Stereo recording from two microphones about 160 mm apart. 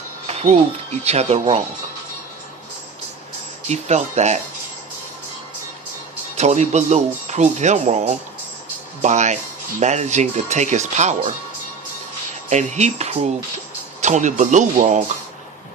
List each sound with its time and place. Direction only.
0.3 s speech: 40° right (ahead or behind)
3.7 s speech: 45° right (ahead or behind)
6.3 s speech: 45° right (ahead or behind)
12.5 s speech: 45° right (ahead or behind)